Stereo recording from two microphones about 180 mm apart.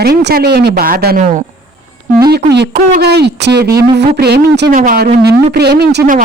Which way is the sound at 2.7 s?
55° right (ahead or behind).